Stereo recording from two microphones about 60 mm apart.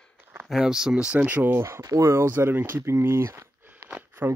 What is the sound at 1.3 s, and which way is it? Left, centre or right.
Speech, right.